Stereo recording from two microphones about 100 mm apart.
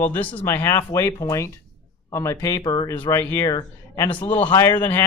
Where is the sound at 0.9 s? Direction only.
35° left (ahead or behind).